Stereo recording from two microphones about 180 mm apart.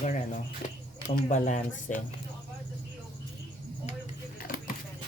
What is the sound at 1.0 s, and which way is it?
Speech, 45° left (ahead or behind).